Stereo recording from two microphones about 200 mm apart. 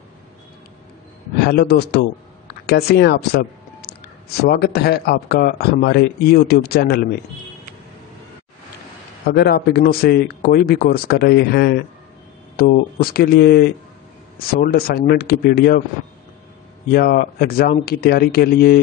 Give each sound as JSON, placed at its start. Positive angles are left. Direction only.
{"t": 1.4, "sound": "speech", "side_deg": 50}
{"t": 9.3, "sound": "speech", "side_deg": 55}
{"t": 16.9, "sound": "speech", "side_deg": 50}